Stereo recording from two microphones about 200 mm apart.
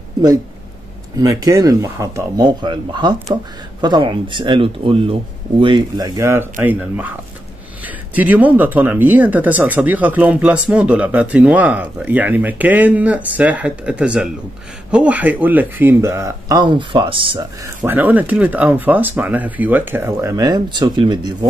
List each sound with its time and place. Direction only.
1.1 s speech: 15° right (ahead or behind)
17.8 s speech: 10° right (ahead or behind)